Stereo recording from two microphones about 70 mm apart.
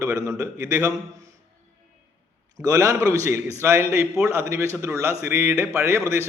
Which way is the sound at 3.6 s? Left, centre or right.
Right.